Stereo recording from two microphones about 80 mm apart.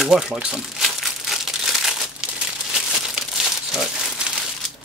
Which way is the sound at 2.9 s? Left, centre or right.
Centre.